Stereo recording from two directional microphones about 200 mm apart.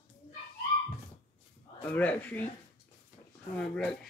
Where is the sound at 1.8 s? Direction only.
5° left (ahead or behind).